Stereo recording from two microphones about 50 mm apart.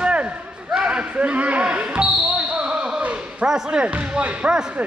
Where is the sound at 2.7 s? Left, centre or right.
Centre.